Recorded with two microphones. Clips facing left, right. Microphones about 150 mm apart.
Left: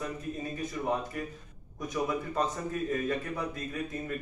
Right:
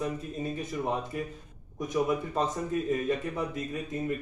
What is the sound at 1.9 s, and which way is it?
Speech, 20° right (ahead or behind).